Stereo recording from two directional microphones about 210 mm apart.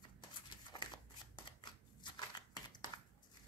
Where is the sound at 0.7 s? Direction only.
25° left (ahead or behind).